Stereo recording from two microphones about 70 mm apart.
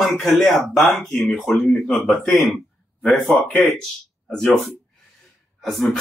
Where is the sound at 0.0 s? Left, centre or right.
Centre.